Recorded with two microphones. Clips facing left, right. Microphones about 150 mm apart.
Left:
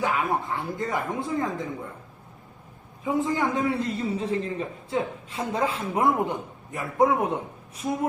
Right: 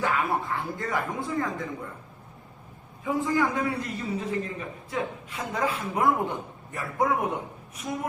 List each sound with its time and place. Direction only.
0.0 s a man's voice: 20° left (ahead or behind)
3.0 s a man's voice: 20° left (ahead or behind)